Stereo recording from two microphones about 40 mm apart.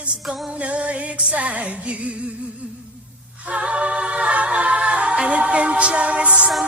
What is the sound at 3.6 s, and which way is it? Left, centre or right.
Music, right.